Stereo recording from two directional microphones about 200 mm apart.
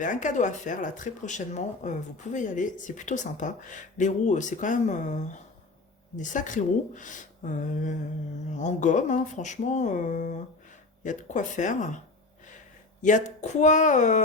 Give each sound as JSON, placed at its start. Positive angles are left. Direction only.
{"t": 0.0, "sound": "speech", "side_deg": 40}
{"t": 13.0, "sound": "speech", "side_deg": 40}